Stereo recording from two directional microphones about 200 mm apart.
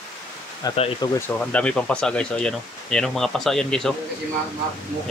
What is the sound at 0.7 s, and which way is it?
Speech, 30° left (ahead or behind).